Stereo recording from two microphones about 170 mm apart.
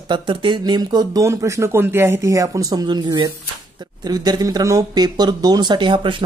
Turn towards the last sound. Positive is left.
turn(degrees=-30)  # may be behind; listen again after turning